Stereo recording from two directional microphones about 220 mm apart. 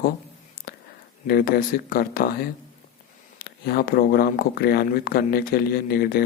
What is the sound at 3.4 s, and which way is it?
Speech, 45° left (ahead or behind).